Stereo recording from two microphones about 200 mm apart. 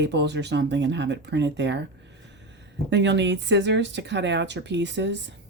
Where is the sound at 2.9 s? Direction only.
60° right (ahead or behind).